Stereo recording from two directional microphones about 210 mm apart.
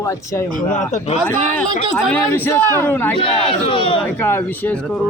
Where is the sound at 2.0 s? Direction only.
10° left (ahead or behind).